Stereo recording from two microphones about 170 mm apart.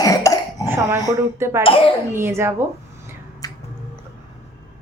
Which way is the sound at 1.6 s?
30° left (ahead or behind).